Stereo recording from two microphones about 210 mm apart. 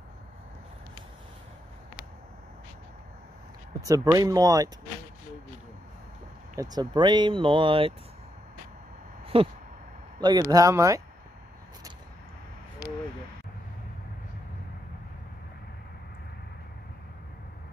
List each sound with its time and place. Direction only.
3.8 s speech: 15° right (ahead or behind)
6.5 s speech: 15° right (ahead or behind)
9.3 s speech: 25° right (ahead or behind)
10.5 s speech: 15° right (ahead or behind)